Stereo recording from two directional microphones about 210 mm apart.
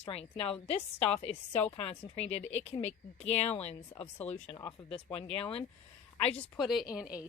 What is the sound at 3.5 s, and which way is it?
Speech, 30° left (ahead or behind).